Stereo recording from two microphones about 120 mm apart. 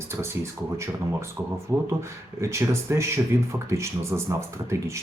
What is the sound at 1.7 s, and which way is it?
Speech, 20° right (ahead or behind).